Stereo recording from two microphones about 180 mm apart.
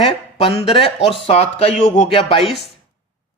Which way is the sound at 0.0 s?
30° left (ahead or behind).